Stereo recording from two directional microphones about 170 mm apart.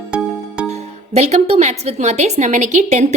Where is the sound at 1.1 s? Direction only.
40° right (ahead or behind).